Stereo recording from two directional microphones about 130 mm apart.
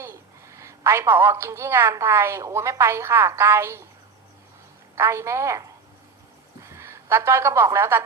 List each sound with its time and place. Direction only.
0.0 s a woman's voice: 20° right (ahead or behind)
4.9 s a woman's voice: 20° right (ahead or behind)